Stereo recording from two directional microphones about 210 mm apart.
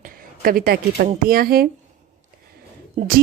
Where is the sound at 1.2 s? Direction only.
45° right (ahead or behind).